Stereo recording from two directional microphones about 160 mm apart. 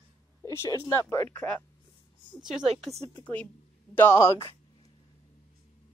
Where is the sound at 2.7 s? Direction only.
Centre (ahead or behind); by 4.4 s 15° left (ahead or behind).